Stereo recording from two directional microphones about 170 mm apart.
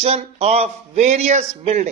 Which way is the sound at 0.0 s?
35° right (ahead or behind).